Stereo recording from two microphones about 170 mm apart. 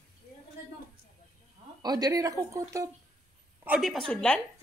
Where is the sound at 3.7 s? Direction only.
Centre (ahead or behind).